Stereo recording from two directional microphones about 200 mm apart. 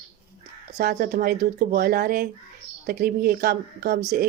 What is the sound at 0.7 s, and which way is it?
Speech, 45° right (ahead or behind).